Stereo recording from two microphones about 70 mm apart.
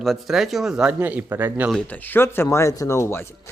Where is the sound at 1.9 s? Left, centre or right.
Left.